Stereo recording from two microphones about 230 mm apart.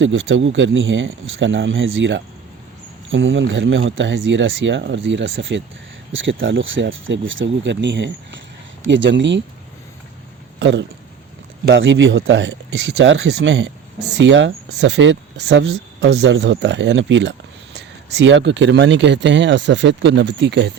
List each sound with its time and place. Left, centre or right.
0.0 s speech: right
10.6 s speech: right